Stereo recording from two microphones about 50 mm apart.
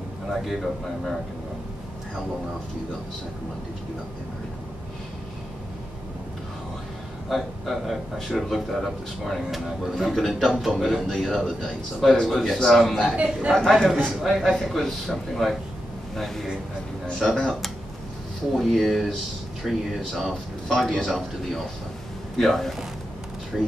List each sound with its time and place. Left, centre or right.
0.3 s a man's voice: centre
7.2 s a man's voice: centre
13.1 s a man's voice: right
13.9 s a man's voice: centre
17.1 s speech: centre
18.6 s a man's voice: centre